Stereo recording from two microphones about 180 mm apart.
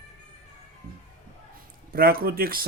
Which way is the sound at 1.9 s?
55° right (ahead or behind).